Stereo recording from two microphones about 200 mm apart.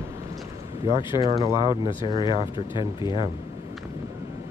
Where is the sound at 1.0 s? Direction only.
25° left (ahead or behind).